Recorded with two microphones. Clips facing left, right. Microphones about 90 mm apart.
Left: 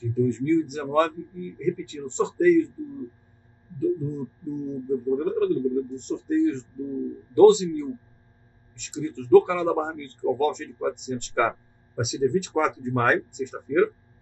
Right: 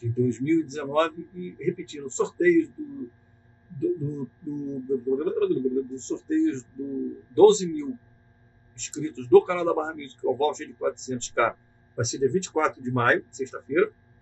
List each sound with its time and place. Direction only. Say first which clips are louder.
0.0 s speech: left 1 dB; 10° left (ahead or behind)
4.0 s speech: left 1 dB; 10° left (ahead or behind)